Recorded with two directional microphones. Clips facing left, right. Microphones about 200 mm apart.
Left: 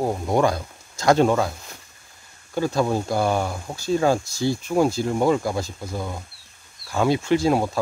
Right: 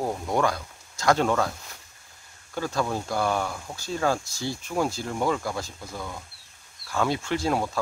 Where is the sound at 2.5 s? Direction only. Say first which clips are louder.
Left 6 dB; 15° left (ahead or behind).